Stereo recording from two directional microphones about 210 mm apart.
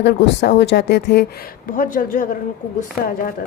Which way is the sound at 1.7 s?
40° left (ahead or behind).